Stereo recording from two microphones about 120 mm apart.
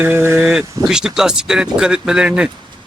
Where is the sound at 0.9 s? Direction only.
5° right (ahead or behind).